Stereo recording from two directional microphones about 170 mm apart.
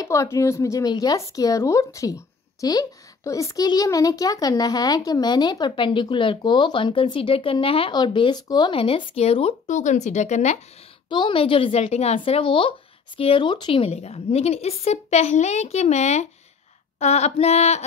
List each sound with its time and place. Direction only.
0.0 s speech: 20° left (ahead or behind); by 10.6 s 45° left (ahead or behind)
11.1 s a woman's voice: 25° left (ahead or behind)